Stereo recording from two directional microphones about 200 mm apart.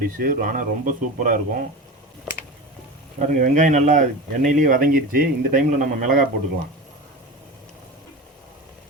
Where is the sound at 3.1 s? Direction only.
40° right (ahead or behind).